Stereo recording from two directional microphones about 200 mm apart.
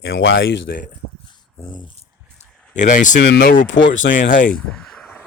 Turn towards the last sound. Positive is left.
turn(degrees=5)  # may be behind; listen again after turning